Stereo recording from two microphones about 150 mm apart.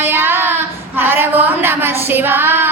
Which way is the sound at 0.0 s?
15° right (ahead or behind).